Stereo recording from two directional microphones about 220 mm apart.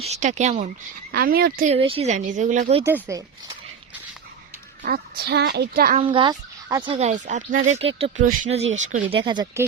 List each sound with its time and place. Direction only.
0.0 s speech: 30° right (ahead or behind)
1.1 s a child's voice: 45° right (ahead or behind)
1.6 s speech: 25° right (ahead or behind)
2.8 s speech: 15° right (ahead or behind)
4.8 s a child's voice: 45° right (ahead or behind)
6.0 s speech: 25° right (ahead or behind)
9.2 s speech: 20° right (ahead or behind)